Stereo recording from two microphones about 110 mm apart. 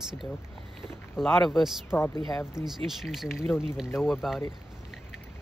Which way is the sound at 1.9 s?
25° left (ahead or behind).